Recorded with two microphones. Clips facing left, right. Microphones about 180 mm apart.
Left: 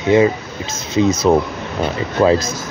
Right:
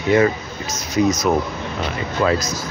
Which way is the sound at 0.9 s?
30° left (ahead or behind).